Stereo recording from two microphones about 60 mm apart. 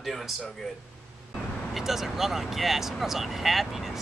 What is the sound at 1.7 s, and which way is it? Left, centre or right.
A man's voice, centre.